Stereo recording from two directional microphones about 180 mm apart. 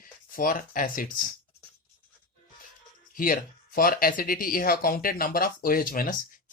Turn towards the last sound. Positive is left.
turn(degrees=55)  # may be behind; listen again after turning